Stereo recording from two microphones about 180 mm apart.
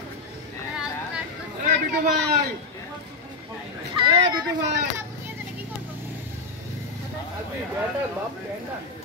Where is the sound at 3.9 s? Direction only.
25° right (ahead or behind).